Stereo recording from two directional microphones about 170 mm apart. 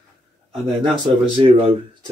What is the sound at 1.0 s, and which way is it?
Speech, 30° right (ahead or behind).